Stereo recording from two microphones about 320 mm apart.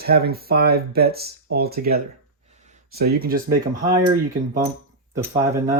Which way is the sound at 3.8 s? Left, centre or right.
Centre.